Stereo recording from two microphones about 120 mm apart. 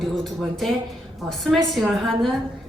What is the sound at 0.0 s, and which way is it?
A man's voice, centre (ahead or behind).